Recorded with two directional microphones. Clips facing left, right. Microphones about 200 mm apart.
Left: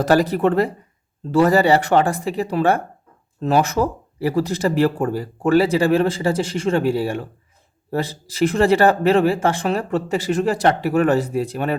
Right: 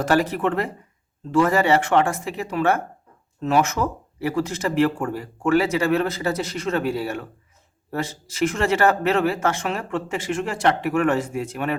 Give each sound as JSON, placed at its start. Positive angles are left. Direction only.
{"t": 0.0, "sound": "speech", "side_deg": 35}